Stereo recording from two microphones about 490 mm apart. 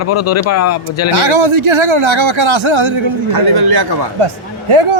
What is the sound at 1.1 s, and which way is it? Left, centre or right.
Speech, right.